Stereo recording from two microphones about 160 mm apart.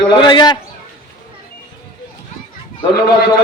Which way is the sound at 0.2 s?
30° left (ahead or behind).